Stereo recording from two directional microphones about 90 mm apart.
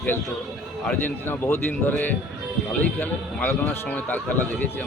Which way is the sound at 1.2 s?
20° left (ahead or behind).